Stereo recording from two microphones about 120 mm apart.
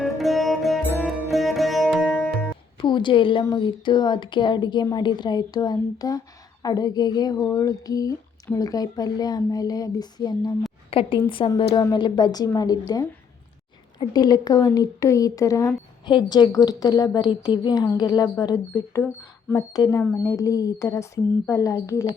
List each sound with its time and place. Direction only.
0.0 s sitar: centre (ahead or behind)
2.7 s a woman's voice: 40° left (ahead or behind)
10.9 s a woman's voice: 50° left (ahead or behind); by 22.0 s 25° left (ahead or behind)